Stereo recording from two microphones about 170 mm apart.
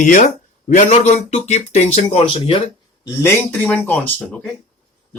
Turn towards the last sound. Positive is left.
turn(degrees=10)  # may be behind; listen again after turning